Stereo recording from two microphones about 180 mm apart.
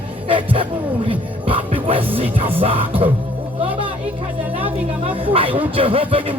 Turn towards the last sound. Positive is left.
turn(degrees=-30)  # may be behind; listen again after turning